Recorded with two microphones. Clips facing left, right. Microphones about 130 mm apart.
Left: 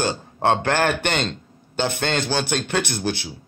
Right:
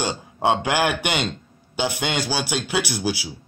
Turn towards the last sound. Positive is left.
turn(degrees=-10)  # may be behind; listen again after turning